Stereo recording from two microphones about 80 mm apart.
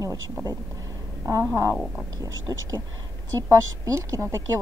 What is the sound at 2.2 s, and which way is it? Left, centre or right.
Speech, right.